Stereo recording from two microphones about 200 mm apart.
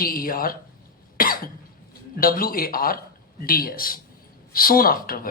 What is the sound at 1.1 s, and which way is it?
Cough, 45° left (ahead or behind).